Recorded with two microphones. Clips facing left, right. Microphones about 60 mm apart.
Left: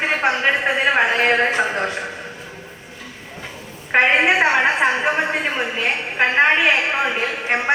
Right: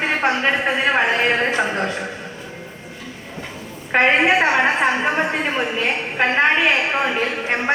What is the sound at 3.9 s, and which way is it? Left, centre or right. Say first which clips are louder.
A woman's voice: even; centre.